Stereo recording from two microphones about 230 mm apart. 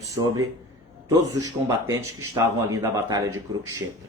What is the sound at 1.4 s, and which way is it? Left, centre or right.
Speech, centre.